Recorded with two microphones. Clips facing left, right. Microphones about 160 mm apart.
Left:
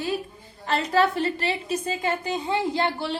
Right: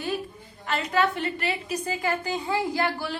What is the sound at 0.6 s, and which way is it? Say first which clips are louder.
A woman's voice: left 3 dB; 35° left (ahead or behind).